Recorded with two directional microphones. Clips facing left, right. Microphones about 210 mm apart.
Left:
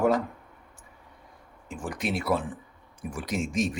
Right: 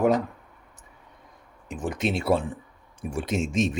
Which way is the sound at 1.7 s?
20° right (ahead or behind).